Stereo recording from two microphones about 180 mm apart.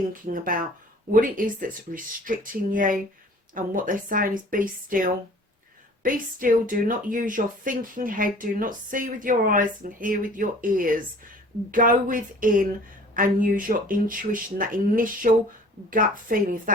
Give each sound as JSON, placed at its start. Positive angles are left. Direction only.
{"t": 0.1, "sound": "speech", "side_deg": -50}